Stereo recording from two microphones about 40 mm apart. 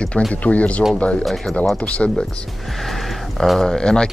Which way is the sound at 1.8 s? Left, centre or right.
Left.